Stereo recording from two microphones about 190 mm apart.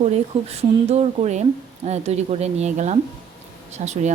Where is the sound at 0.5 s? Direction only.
35° right (ahead or behind).